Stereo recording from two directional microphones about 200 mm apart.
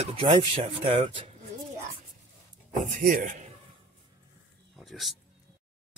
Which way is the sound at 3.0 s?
40° right (ahead or behind).